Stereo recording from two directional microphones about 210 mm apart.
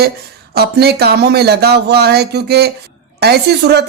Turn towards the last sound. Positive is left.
turn(degrees=-50)  # may be behind; listen again after turning